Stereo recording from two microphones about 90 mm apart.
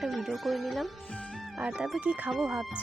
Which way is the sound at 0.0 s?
Centre (ahead or behind).